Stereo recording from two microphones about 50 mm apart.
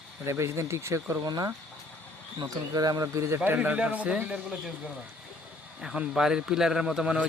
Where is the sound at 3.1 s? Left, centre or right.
Right.